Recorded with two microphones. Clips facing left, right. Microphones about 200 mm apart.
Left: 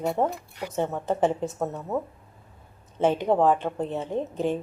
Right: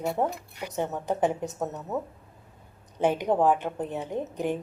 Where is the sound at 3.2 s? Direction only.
15° right (ahead or behind).